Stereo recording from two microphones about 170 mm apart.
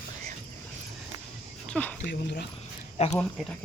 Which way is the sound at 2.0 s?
80° left.